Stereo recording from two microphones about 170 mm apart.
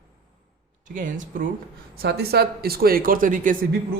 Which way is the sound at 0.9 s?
50° right (ahead or behind).